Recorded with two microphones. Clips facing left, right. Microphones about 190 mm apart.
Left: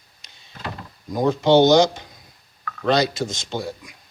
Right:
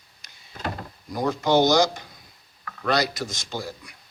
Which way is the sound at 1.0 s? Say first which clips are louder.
Left 5 dB; 20° left (ahead or behind).